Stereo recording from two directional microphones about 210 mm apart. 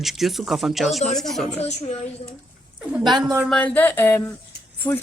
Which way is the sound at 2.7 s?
Centre (ahead or behind).